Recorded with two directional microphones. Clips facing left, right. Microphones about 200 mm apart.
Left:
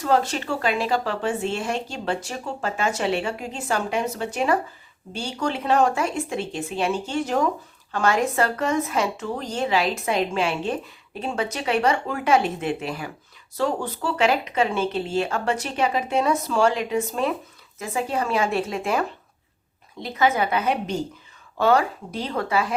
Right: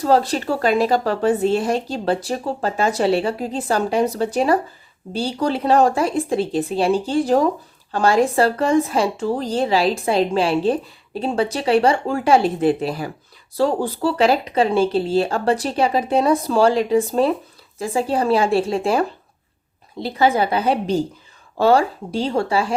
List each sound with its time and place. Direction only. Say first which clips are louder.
0.0 s speech: right 5 dB; 35° right (ahead or behind)